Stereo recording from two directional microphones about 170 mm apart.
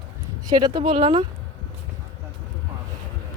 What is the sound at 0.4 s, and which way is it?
Speech, 25° right (ahead or behind).